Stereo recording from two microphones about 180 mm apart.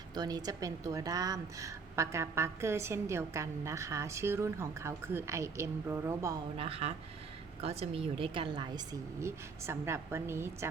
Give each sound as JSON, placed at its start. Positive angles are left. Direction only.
{"t": 0.1, "sound": "a woman's voice", "side_deg": -20}
{"t": 6.6, "sound": "a woman's voice", "side_deg": -35}